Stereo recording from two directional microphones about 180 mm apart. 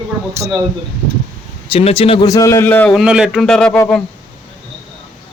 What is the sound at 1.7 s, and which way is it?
Speech, 35° left (ahead or behind).